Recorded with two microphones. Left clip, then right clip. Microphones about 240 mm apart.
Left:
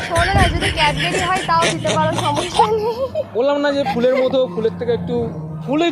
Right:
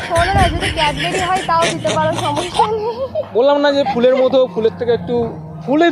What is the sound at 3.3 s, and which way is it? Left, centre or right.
Speech, centre.